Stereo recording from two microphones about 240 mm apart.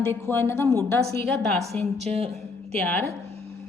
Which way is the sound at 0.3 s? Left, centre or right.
Centre.